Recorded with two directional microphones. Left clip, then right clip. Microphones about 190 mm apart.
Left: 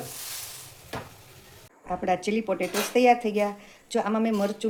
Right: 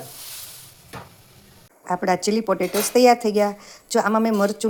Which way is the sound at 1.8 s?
35° right (ahead or behind).